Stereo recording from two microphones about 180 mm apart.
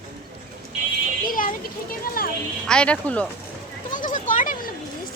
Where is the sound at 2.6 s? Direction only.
5° left (ahead or behind).